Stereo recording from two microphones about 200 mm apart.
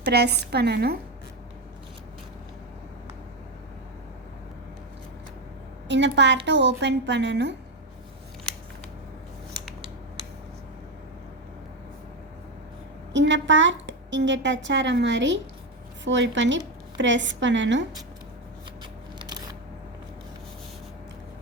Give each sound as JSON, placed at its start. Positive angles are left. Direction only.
{"t": 0.0, "sound": "a woman's voice", "side_deg": -55}
{"t": 5.9, "sound": "a woman's voice", "side_deg": -60}
{"t": 13.1, "sound": "a woman's voice", "side_deg": -65}